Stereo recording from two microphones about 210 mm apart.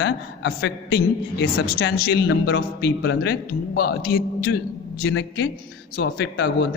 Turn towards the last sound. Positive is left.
turn(degrees=55)  # may be behind; listen again after turning